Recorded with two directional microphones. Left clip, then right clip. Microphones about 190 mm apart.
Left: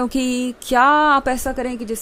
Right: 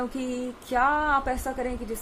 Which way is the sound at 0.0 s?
50° left (ahead or behind).